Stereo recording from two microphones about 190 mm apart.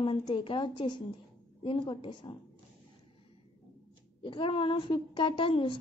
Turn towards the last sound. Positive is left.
turn(degrees=25)  # may be behind; listen again after turning